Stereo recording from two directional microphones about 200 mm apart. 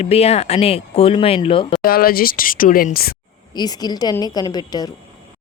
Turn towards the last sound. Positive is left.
turn(degrees=20)  # may be behind; listen again after turning